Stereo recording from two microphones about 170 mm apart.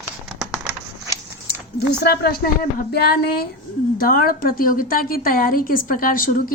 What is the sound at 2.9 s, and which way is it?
A woman's voice, 65° left (ahead or behind).